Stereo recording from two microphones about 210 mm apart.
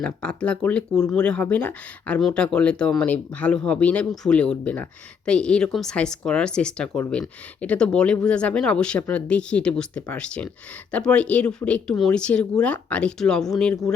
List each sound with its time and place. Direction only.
0.0 s speech: 5° left (ahead or behind)